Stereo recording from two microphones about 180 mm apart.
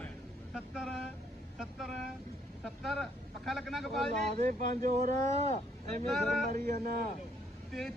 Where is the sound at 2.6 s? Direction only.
5° left (ahead or behind).